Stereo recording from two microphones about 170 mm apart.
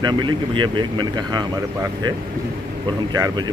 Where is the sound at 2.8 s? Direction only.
25° right (ahead or behind).